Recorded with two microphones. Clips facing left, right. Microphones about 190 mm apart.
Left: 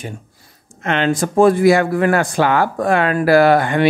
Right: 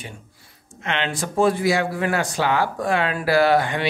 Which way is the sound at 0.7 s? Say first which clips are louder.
Left 8 dB; 45° left (ahead or behind).